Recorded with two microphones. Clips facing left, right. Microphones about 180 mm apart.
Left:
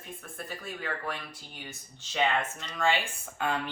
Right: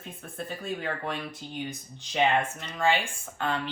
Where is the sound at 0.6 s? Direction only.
25° right (ahead or behind).